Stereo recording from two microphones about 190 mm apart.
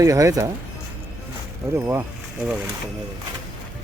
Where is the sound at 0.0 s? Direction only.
15° right (ahead or behind).